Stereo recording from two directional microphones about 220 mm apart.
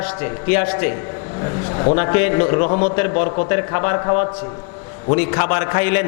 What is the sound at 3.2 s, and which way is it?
A man's voice, 25° left (ahead or behind).